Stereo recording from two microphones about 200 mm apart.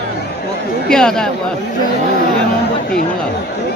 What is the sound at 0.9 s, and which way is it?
Speech, 5° left (ahead or behind).